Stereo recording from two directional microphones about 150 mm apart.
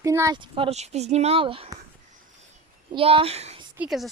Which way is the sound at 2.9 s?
35° right (ahead or behind).